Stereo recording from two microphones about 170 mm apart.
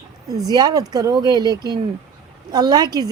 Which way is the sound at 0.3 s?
20° right (ahead or behind).